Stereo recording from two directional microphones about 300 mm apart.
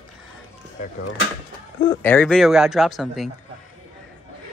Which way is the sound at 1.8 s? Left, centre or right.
Centre.